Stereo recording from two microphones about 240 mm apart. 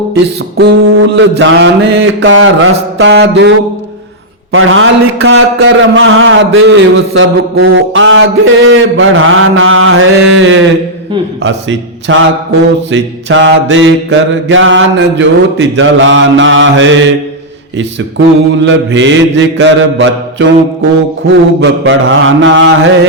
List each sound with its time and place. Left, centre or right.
0.1 s a man's voice: right
4.5 s a man's voice: right
18.6 s a man's voice: right
21.6 s a man's voice: right